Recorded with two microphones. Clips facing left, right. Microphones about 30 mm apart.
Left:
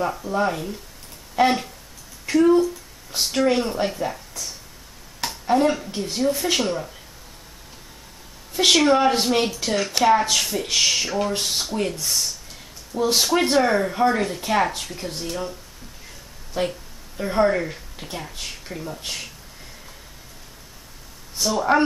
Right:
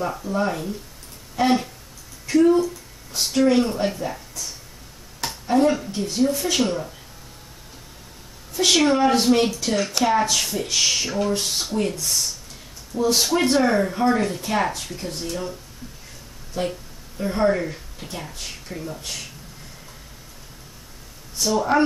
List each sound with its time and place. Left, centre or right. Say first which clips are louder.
0.3 s speech: even; centre
2.3 s speech: even; centre
5.2 s a sound: even; centre
6.0 s speech: even; centre
8.6 s speech: left 2 dB; left
8.9 s speech: right 1 dB; centre
16.6 s speech: left 1 dB; left; by 18.9 s centre
18.9 s speech: left 2 dB; centre
21.4 s speech: even; centre